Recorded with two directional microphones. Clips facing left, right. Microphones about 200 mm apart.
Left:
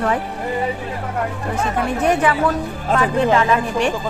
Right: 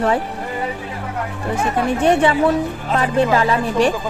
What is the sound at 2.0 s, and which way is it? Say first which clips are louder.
A woman's voice: right 3 dB; 30° right (ahead or behind).